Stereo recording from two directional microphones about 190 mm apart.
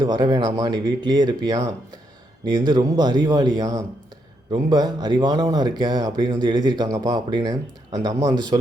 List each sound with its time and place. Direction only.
0.0 s speech: 25° right (ahead or behind)